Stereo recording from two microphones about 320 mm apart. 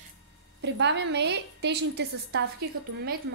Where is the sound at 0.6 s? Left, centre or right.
Right.